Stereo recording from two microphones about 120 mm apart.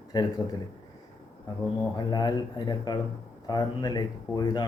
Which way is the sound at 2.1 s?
35° left (ahead or behind).